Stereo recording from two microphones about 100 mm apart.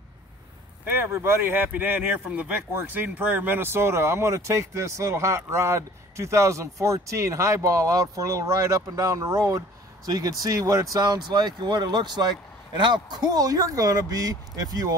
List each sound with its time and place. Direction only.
0.9 s speech: 25° right (ahead or behind)